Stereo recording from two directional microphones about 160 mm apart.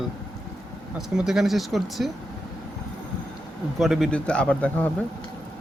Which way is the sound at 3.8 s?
Centre (ahead or behind).